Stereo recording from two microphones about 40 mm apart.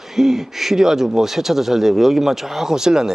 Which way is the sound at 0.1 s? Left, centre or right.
Centre.